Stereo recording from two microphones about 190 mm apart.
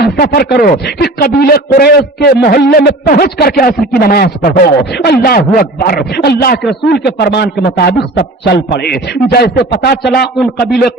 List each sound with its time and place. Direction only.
0.0 s a man's voice: 55° left (ahead or behind)